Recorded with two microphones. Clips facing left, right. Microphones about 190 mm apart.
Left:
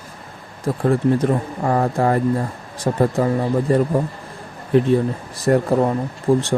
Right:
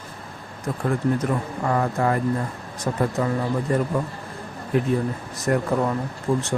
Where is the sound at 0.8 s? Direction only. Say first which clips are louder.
Left 6 dB; 30° left (ahead or behind).